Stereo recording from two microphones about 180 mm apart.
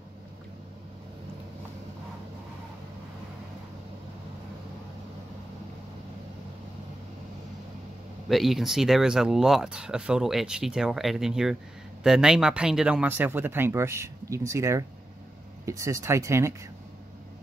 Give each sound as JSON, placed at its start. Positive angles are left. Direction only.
{"t": 8.3, "sound": "speech", "side_deg": 0}